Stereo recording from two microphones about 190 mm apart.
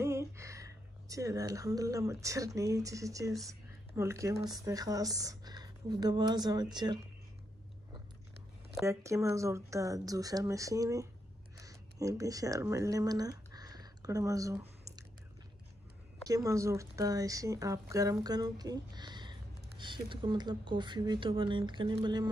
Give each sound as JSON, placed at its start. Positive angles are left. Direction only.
{"t": 0.0, "sound": "a woman's voice", "side_deg": -15}
{"t": 8.8, "sound": "speech", "side_deg": -15}
{"t": 11.5, "sound": "a sound", "side_deg": -15}
{"t": 16.3, "sound": "speech", "side_deg": -15}